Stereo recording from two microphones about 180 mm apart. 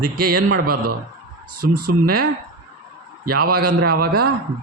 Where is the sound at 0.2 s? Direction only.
55° right (ahead or behind).